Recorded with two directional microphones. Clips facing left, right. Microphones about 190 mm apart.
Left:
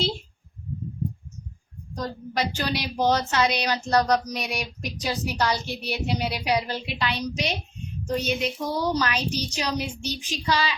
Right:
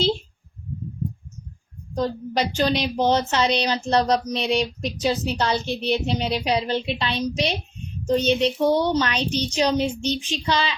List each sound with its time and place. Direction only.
2.0 s a woman's voice: 25° right (ahead or behind)